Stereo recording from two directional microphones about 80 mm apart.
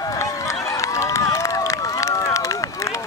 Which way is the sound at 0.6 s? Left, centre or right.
Left.